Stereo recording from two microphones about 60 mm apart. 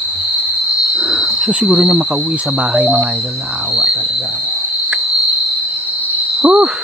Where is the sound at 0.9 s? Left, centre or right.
Centre.